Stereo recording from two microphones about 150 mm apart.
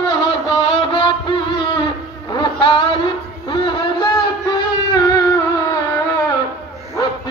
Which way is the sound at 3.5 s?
30° left (ahead or behind).